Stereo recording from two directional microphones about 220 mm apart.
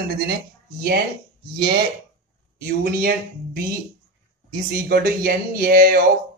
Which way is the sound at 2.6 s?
45° right (ahead or behind).